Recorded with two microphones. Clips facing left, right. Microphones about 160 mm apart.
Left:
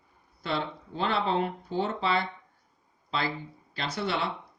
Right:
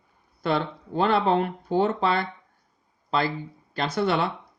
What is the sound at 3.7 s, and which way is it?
Speech, 50° right (ahead or behind).